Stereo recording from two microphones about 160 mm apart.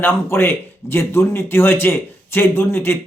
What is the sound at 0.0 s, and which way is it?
A man's voice, 15° left (ahead or behind).